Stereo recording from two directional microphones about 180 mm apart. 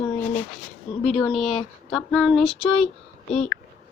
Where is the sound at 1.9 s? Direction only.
Centre (ahead or behind).